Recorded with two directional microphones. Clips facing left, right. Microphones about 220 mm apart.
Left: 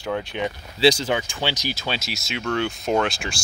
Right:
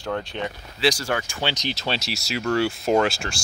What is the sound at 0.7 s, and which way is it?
Speech, 25° left (ahead or behind).